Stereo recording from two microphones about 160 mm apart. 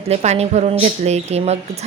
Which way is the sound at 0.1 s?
45° right (ahead or behind).